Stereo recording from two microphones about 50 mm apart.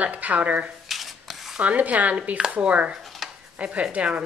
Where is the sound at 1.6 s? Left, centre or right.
Right.